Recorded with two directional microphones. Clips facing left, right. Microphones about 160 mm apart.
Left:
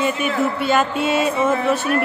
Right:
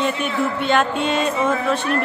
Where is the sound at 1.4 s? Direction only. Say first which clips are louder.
Left 2 dB; 10° left (ahead or behind).